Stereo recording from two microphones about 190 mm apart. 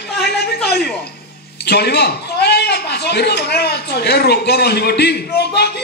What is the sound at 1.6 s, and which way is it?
A man's voice, 60° left (ahead or behind).